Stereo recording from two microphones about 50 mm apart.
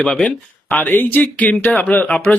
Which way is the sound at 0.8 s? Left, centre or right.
Left.